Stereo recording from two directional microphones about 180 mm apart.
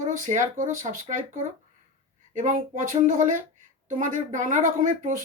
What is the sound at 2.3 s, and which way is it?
Speech, 45° right (ahead or behind).